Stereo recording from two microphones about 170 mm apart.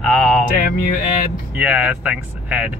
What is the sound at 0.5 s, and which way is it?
Music, 55° left (ahead or behind).